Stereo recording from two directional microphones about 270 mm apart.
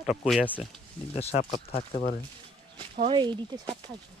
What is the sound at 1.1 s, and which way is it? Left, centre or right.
Speech, left.